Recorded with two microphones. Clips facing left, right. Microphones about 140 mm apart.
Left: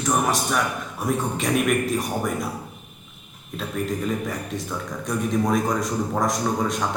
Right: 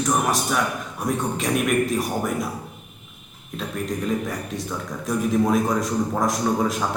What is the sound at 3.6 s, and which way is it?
A man's voice, centre (ahead or behind).